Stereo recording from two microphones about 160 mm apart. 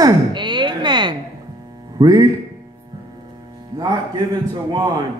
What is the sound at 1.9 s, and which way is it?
Speech, 25° right (ahead or behind).